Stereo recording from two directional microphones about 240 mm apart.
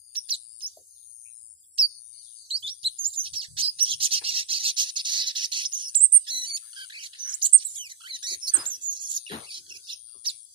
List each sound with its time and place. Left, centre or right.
0.1 s bird: right
1.8 s bird: right
8.9 s a sound: centre